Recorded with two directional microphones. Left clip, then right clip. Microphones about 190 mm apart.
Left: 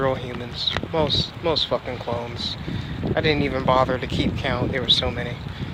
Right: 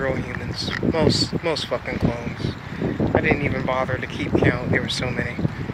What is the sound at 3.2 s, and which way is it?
Speech, 25° left (ahead or behind).